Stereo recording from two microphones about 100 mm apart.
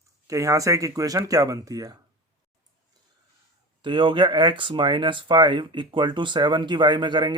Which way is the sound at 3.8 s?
55° right (ahead or behind).